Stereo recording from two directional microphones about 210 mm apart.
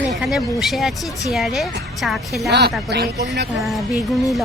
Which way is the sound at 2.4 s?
50° right (ahead or behind).